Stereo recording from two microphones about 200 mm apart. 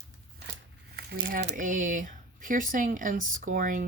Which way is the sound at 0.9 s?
45° right (ahead or behind).